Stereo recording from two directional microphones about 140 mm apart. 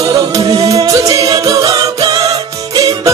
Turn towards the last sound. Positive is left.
turn(degrees=-25)  # may be behind; listen again after turning